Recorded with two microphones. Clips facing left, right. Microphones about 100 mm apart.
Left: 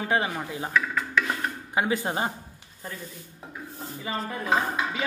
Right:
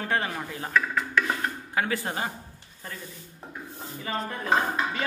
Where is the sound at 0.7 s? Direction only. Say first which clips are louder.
Right 1 dB; centre (ahead or behind).